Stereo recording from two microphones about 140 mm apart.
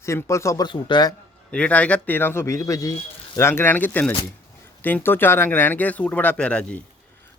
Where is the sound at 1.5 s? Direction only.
10° left (ahead or behind).